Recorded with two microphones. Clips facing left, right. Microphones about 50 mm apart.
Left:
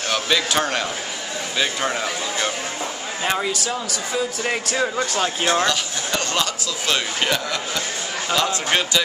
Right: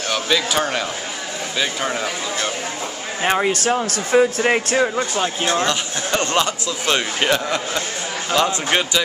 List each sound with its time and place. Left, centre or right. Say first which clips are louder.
0.1 s speech: right 1 dB; centre
3.2 s a man's voice: right 5 dB; right
3.5 s speech: right 6 dB; right
4.4 s a man's voice: right 5 dB; right
4.8 s speech: right 1 dB; centre
5.7 s a man's voice: right 2 dB; right